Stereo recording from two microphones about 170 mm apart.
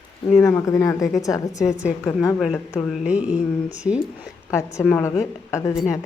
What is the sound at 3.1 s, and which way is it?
Speech, 5° right (ahead or behind).